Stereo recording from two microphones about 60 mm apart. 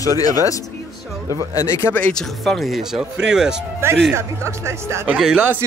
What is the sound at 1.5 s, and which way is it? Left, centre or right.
Speech, left.